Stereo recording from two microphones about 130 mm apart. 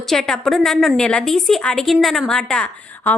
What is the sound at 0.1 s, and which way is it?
A woman's voice, 5° left (ahead or behind).